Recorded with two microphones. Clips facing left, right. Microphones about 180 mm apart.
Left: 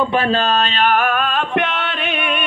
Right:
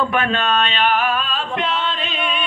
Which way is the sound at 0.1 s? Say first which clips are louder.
Left 3 dB; 35° left (ahead or behind).